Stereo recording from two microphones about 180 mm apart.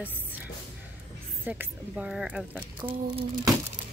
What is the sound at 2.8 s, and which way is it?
Speech, 30° right (ahead or behind).